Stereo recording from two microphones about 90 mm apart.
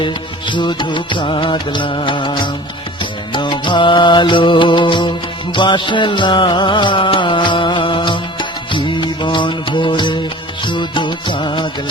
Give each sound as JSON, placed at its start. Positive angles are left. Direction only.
{"t": 0.0, "sound": "music", "side_deg": 60}